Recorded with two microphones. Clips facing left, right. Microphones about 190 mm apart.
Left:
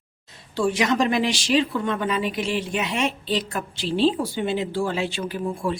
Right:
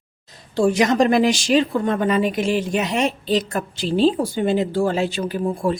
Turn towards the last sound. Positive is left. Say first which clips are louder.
# right 5 dB
turn(degrees=-45)  # may be behind; listen again after turning